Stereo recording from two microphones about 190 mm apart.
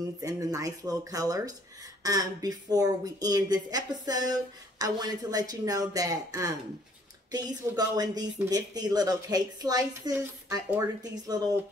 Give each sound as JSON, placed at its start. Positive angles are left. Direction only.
{"t": 0.2, "sound": "speech", "side_deg": -20}